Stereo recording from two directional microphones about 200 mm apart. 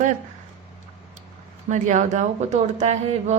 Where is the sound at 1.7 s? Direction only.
35° right (ahead or behind).